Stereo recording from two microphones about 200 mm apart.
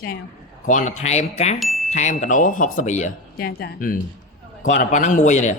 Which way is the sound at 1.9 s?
35° left (ahead or behind).